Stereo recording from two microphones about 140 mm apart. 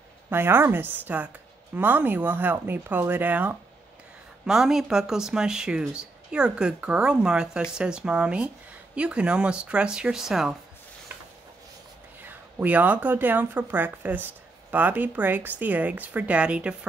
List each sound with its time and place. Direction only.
0.3 s speech: 15° right (ahead or behind)
12.2 s speech: 15° right (ahead or behind)